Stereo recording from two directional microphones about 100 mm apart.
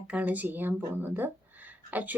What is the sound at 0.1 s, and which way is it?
Speech, 15° right (ahead or behind).